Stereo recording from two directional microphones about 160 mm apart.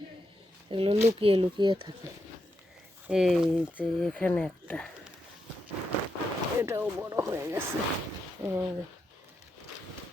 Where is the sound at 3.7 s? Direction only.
5° left (ahead or behind).